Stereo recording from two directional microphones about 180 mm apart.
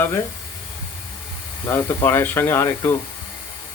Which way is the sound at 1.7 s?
10° left (ahead or behind).